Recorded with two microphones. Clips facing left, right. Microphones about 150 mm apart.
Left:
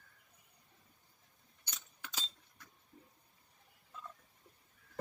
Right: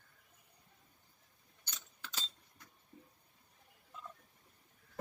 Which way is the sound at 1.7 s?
10° left (ahead or behind).